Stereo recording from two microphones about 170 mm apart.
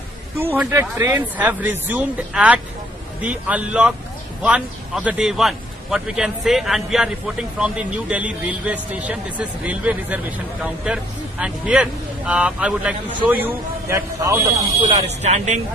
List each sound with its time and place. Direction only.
0.3 s a man's voice: 10° right (ahead or behind)
14.9 s speech: 40° right (ahead or behind)